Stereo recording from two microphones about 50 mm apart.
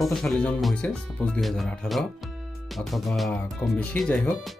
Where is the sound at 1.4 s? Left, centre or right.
Centre.